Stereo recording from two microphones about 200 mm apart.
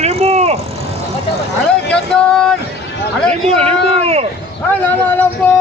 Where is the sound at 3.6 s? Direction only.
30° right (ahead or behind).